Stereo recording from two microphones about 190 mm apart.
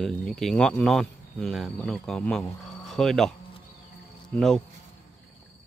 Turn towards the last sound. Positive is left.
turn(degrees=5)  # may be behind; listen again after turning